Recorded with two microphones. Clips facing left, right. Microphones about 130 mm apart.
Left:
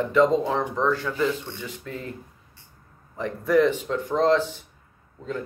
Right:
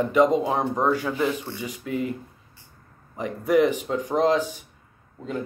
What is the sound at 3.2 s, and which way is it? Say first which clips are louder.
Speech: even; 15° right (ahead or behind).